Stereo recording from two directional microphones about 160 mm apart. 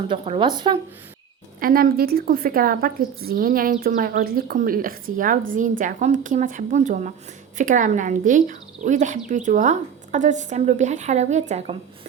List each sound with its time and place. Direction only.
0.1 s speech: 30° right (ahead or behind)
1.5 s a woman's voice: 65° right (ahead or behind); by 11.8 s 40° right (ahead or behind)